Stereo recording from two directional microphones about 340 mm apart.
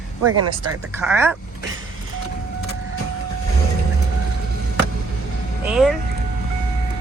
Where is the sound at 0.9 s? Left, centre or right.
Centre.